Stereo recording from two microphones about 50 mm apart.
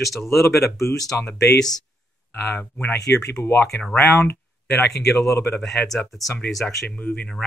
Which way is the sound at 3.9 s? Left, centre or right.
Left.